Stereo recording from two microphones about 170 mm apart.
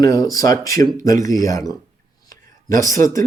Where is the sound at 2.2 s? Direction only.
20° left (ahead or behind).